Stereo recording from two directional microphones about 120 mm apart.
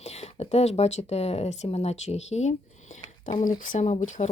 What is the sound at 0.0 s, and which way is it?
Speech, 60° left (ahead or behind).